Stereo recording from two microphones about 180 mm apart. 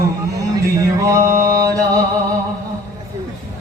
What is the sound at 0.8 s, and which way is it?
Mantra, 15° right (ahead or behind).